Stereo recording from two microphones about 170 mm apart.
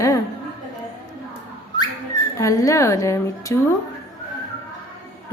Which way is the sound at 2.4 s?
20° left (ahead or behind).